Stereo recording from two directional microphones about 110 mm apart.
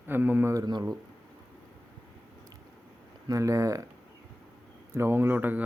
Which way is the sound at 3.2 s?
30° right (ahead or behind).